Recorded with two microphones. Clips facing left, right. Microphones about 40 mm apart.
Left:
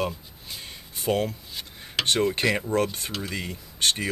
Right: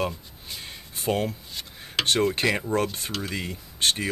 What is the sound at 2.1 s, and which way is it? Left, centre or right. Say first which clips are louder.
Speech: even; centre.